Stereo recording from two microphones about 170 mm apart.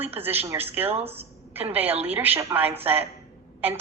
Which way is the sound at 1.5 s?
10° right (ahead or behind).